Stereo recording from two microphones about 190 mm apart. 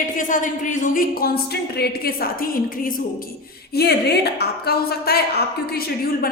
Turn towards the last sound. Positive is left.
turn(degrees=55)  # may be behind; listen again after turning